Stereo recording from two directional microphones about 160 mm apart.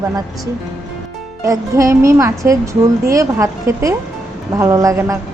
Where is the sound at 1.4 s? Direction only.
20° right (ahead or behind).